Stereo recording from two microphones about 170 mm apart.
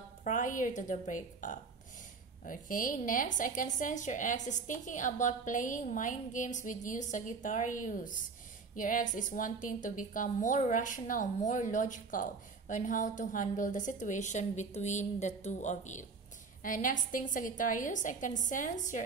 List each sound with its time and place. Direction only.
0.2 s a woman's voice: 50° left (ahead or behind)